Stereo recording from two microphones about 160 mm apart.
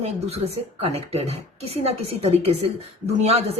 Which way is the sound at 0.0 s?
40° right (ahead or behind).